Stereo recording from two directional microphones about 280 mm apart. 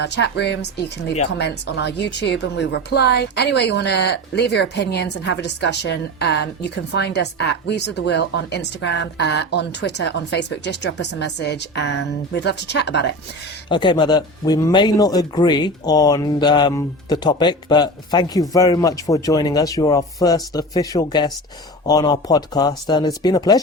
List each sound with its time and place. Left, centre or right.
0.0 s a woman's voice: left
13.7 s speech: centre